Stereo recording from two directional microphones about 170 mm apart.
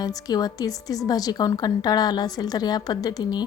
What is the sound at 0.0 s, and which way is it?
A woman's voice, 25° left (ahead or behind).